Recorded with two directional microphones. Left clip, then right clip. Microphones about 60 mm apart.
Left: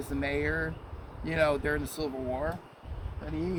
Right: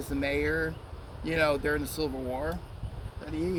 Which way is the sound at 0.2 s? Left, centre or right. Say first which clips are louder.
Right 2 dB; left.